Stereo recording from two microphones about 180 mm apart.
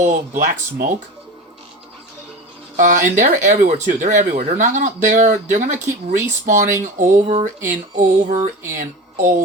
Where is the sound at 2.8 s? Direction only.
45° right (ahead or behind).